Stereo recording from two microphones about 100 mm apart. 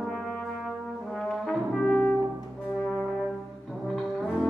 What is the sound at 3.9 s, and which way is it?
Brass instrument, centre (ahead or behind).